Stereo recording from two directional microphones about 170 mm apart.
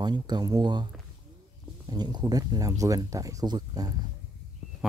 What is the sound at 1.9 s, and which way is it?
Speech, 25° right (ahead or behind).